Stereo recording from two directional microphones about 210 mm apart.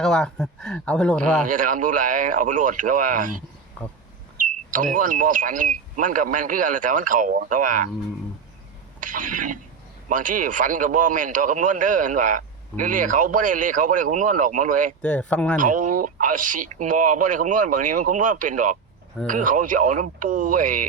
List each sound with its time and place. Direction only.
0.0 s speech: 5° left (ahead or behind)
1.5 s a man's voice: 40° right (ahead or behind)
4.4 s a man's voice: 40° right (ahead or behind)
9.0 s a sound: 40° right (ahead or behind)
10.1 s a man's voice: 40° right (ahead or behind)
15.0 s speech: 5° left (ahead or behind)
15.5 s a man's voice: 40° right (ahead or behind)